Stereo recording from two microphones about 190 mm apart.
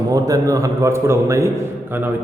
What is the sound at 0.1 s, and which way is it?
A man's voice, 20° right (ahead or behind).